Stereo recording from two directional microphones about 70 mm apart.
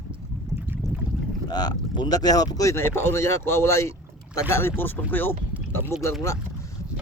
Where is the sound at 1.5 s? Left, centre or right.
Left.